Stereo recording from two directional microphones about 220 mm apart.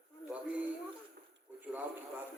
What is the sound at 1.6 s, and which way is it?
Radio, 10° right (ahead or behind).